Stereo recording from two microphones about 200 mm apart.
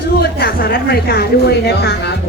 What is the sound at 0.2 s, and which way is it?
Speech, 50° left (ahead or behind).